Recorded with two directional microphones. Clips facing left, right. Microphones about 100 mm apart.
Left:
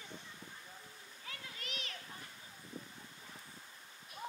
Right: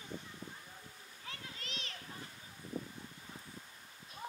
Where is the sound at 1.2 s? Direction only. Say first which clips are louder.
Right 1 dB; 30° right (ahead or behind).